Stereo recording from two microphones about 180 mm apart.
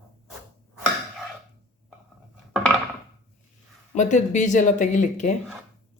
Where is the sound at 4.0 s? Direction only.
40° left (ahead or behind).